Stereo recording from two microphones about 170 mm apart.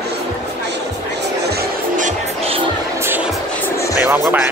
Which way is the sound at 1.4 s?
70° right (ahead or behind).